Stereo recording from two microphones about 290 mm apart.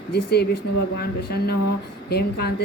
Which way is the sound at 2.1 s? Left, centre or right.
Left.